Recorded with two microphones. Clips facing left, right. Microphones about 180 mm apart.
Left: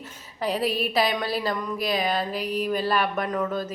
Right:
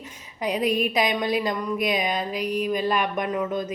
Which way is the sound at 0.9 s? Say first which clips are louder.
Right 1 dB; 15° right (ahead or behind).